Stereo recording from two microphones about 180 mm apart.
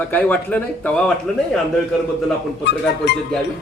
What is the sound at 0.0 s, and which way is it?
A man's voice, 10° left (ahead or behind).